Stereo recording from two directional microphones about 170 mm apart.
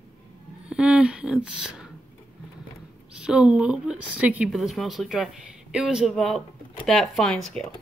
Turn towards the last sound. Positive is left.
turn(degrees=5)  # may be behind; listen again after turning